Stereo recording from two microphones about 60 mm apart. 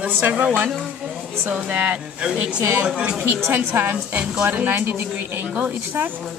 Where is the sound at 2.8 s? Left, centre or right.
Centre.